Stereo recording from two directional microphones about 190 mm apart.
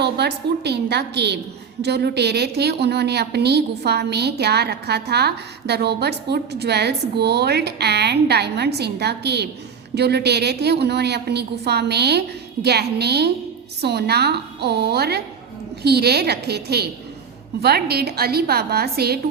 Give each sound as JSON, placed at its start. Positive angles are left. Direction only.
{"t": 0.0, "sound": "a woman's voice", "side_deg": -60}